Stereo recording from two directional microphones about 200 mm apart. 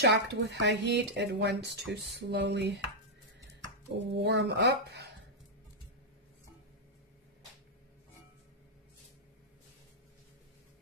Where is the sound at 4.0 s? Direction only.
60° right (ahead or behind).